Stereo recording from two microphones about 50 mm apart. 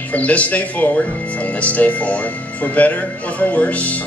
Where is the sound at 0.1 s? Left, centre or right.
Left.